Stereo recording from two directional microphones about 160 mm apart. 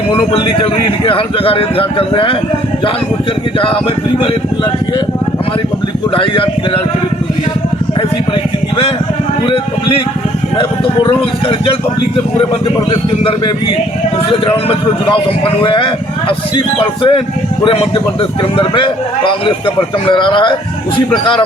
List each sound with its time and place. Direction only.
0.1 s a man's voice: 30° left (ahead or behind)
6.1 s a man's voice: 35° left (ahead or behind)
10.6 s a man's voice: 35° left (ahead or behind)
12.9 s a man's voice: 35° left (ahead or behind)